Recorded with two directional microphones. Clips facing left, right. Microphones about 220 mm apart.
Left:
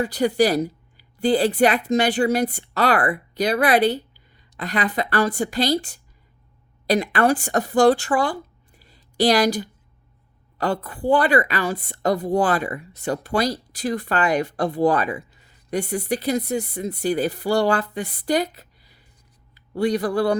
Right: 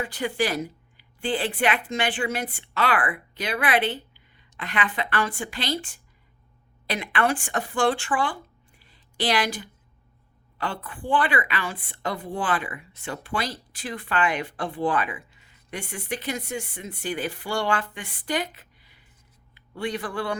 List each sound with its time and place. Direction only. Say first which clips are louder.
0.0 s a woman's voice: left 8 dB; 40° left (ahead or behind)
8.8 s a sound: left 9 dB; 40° left (ahead or behind)
10.6 s a woman's voice: left 8 dB; 40° left (ahead or behind)